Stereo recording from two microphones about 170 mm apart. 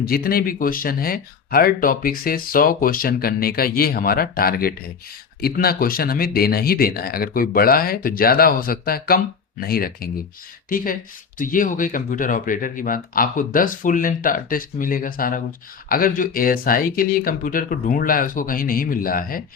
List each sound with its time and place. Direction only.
0.0 s speech: 60° left (ahead or behind)